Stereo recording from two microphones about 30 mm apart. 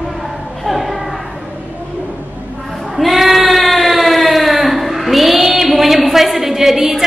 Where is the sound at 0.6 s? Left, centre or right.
Centre.